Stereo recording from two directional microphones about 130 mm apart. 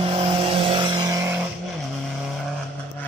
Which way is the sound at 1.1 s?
20° right (ahead or behind).